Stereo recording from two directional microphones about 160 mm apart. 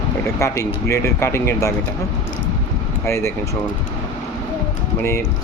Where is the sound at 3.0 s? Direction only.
15° left (ahead or behind).